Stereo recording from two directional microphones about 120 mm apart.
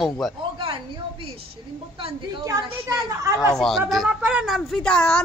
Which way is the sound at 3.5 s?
Centre (ahead or behind).